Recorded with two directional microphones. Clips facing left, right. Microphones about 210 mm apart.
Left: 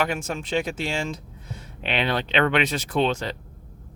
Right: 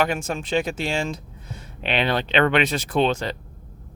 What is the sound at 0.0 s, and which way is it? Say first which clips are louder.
Speech: right 3 dB; 30° right (ahead or behind).